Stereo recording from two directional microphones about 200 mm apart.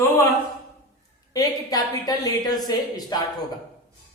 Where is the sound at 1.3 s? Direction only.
20° left (ahead or behind).